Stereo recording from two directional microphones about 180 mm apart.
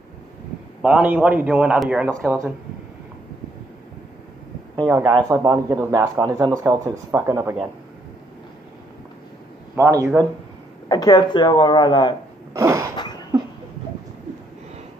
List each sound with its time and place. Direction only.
0.8 s a man's voice: 5° right (ahead or behind)
2.0 s speech: 15° right (ahead or behind)
4.7 s speech: 20° right (ahead or behind)
9.8 s speech: 15° right (ahead or behind)
10.9 s speech: 20° left (ahead or behind)
12.5 s speech: 15° right (ahead or behind)